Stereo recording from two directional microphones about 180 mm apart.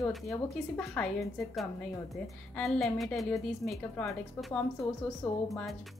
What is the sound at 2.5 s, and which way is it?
A woman's voice, centre (ahead or behind).